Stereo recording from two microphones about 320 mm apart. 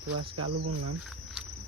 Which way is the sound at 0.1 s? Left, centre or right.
Right.